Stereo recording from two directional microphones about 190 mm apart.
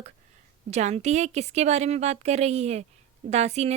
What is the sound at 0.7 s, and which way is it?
Speech, 35° right (ahead or behind).